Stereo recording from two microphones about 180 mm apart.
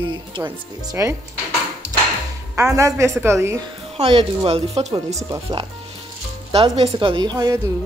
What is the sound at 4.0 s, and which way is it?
Speech, 30° right (ahead or behind).